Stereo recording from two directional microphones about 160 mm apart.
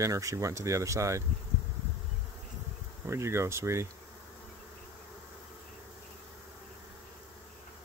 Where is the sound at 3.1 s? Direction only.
15° right (ahead or behind).